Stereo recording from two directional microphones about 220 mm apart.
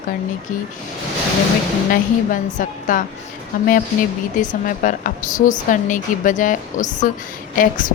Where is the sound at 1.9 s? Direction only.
40° left (ahead or behind).